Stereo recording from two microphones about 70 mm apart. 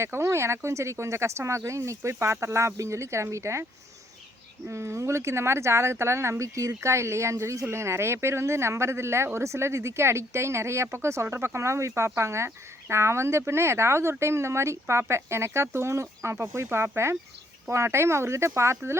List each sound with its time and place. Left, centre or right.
0.0 s speech: right
4.7 s speech: right